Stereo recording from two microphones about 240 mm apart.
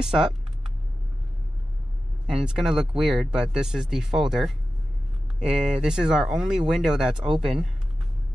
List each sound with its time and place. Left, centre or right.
0.0 s speech: centre
2.3 s speech: centre